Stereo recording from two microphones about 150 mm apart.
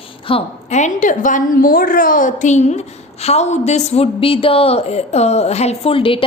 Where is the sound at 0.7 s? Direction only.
55° left (ahead or behind).